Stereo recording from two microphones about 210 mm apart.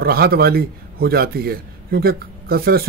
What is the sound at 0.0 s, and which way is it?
A man's voice, 45° right (ahead or behind).